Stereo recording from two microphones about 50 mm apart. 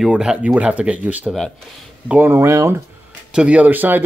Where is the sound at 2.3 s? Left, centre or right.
Right.